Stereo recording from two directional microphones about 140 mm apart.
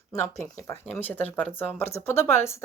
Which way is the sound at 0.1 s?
20° left (ahead or behind).